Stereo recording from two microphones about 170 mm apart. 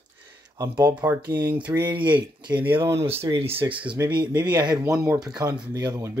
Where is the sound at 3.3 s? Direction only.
35° right (ahead or behind).